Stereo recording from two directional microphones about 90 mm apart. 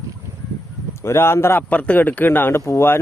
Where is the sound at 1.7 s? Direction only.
15° left (ahead or behind).